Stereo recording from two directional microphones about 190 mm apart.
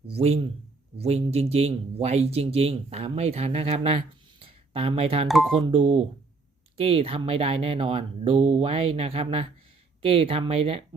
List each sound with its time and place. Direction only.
0.1 s speech: 35° right (ahead or behind)
4.4 s telephone dialing: 30° right (ahead or behind)
5.3 s speech: centre (ahead or behind)
5.6 s speech: 25° right (ahead or behind)